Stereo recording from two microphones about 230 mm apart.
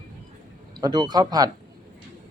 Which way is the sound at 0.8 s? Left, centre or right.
Centre.